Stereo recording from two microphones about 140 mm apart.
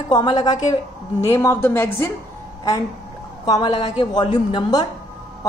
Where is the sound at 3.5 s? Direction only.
30° left (ahead or behind).